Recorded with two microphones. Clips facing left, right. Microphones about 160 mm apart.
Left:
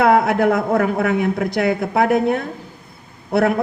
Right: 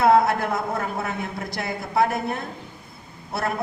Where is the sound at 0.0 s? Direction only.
60° left (ahead or behind).